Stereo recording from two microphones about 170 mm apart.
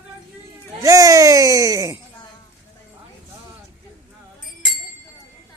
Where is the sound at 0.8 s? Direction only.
20° right (ahead or behind).